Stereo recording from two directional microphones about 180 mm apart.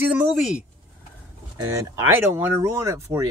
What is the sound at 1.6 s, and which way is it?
Speech, 10° right (ahead or behind).